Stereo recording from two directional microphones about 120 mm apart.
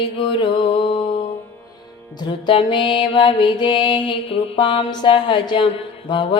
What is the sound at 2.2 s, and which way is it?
Music, 40° left (ahead or behind).